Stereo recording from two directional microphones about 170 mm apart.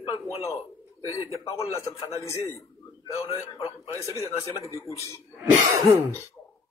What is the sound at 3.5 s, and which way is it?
Speech, 35° left (ahead or behind).